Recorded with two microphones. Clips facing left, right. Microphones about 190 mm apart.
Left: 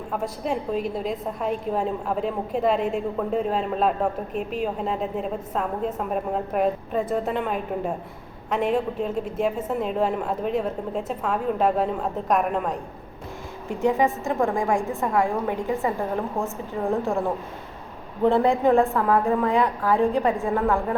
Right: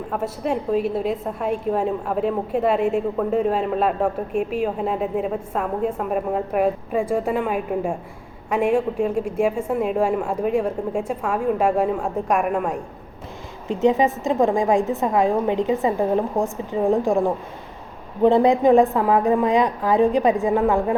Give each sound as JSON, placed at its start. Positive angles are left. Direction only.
{"t": 0.1, "sound": "a woman's voice", "side_deg": -5}
{"t": 13.7, "sound": "a woman's voice", "side_deg": -20}